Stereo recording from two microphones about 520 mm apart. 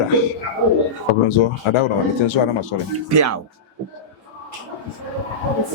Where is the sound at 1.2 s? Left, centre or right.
Left.